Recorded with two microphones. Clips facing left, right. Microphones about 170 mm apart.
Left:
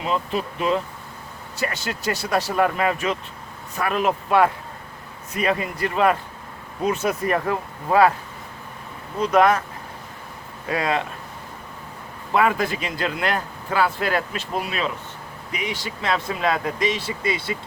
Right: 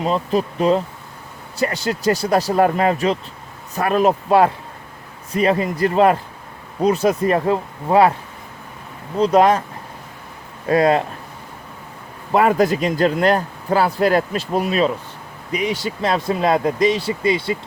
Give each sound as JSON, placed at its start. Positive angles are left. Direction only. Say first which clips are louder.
{"t": 0.0, "sound": "speech", "louder": "right 5 dB", "side_deg": -40}
{"t": 9.1, "sound": "speech", "louder": "right 4 dB", "side_deg": -30}
{"t": 10.7, "sound": "speech", "louder": "right 8 dB", "side_deg": -40}
{"t": 12.3, "sound": "speech", "louder": "right 5 dB", "side_deg": -40}